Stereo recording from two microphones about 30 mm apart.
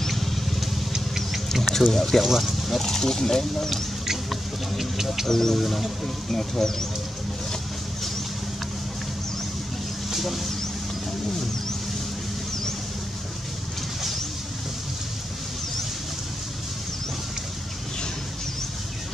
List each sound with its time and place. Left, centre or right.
0.0 s vehicle: centre
0.9 s vehicle: centre
1.5 s speech: centre
5.3 s speech: centre
5.6 s music: centre
6.3 s speech: centre
10.1 s speech: centre